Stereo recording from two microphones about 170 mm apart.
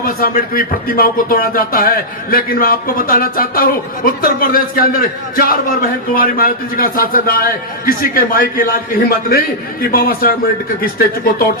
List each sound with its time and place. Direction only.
0.0 s speech: 55° left (ahead or behind)